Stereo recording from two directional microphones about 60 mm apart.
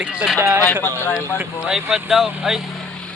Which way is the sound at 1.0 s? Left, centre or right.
Left.